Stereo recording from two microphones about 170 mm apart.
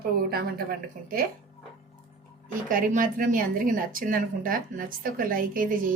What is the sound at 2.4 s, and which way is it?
Speech, 55° right (ahead or behind).